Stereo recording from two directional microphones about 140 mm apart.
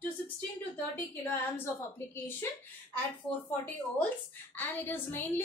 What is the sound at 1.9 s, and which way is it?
A woman's voice, 15° left (ahead or behind).